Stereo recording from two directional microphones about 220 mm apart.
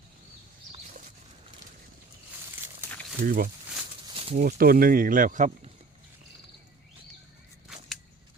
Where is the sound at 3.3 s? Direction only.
40° right (ahead or behind).